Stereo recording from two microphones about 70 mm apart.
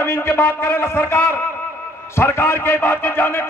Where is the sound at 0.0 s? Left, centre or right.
Left.